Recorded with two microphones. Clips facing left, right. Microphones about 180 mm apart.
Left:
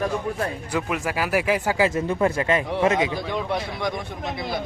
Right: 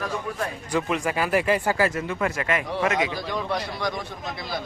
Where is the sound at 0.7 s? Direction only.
5° left (ahead or behind).